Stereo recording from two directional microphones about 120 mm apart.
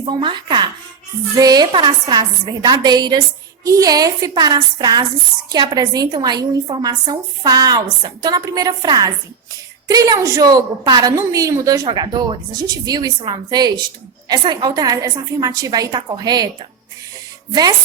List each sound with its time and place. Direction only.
0.0 s a woman's voice: 40° right (ahead or behind)
17.5 s a woman's voice: 35° right (ahead or behind)